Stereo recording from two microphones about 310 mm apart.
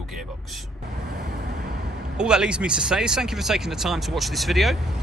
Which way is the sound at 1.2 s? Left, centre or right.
Right.